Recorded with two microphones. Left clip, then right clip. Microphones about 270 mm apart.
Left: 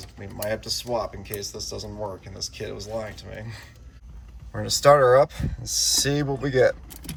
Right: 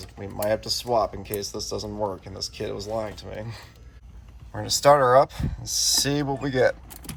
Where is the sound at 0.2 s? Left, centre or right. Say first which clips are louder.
Right 4 dB; centre.